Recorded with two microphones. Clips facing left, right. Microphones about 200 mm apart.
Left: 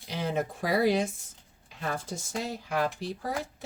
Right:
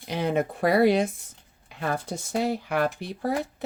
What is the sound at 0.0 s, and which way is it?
Speech, 60° right (ahead or behind).